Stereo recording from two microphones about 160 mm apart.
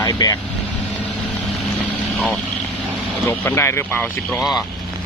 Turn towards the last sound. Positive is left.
turn(degrees=15)  # may be behind; listen again after turning